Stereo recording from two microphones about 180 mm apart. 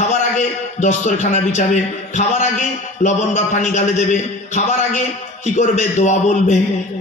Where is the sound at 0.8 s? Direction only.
40° left (ahead or behind).